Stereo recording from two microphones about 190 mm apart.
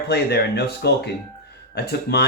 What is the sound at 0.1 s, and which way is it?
Speech, 60° left (ahead or behind).